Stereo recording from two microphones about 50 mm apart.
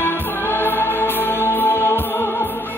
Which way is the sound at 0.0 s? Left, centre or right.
Left.